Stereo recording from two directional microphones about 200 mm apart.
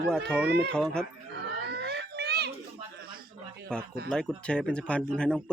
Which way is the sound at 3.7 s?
5° left (ahead or behind).